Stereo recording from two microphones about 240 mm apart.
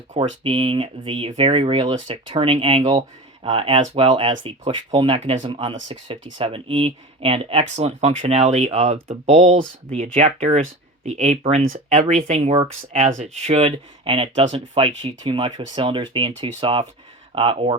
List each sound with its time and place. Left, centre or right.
0.1 s speech: right